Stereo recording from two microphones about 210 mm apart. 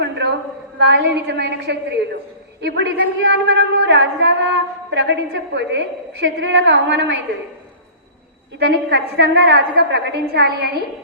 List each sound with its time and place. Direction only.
0.0 s a sound: 55° right (ahead or behind)
0.8 s a woman's voice: 55° right (ahead or behind)
8.5 s a woman's voice: 50° right (ahead or behind)